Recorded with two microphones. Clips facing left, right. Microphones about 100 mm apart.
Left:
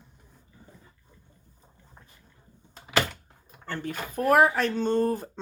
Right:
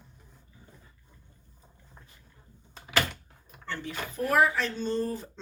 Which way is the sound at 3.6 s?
45° left (ahead or behind).